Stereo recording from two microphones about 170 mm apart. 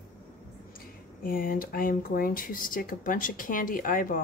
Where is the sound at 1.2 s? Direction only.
55° left (ahead or behind).